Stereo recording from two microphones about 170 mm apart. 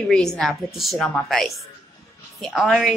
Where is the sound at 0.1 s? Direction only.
5° left (ahead or behind).